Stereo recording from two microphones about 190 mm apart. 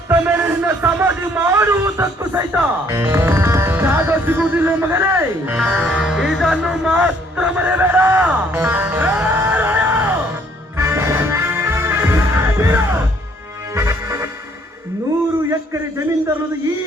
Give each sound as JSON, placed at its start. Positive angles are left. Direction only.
{"t": 0.1, "sound": "a man's voice", "side_deg": -10}
{"t": 10.8, "sound": "music", "side_deg": -15}
{"t": 15.4, "sound": "a man's voice", "side_deg": -15}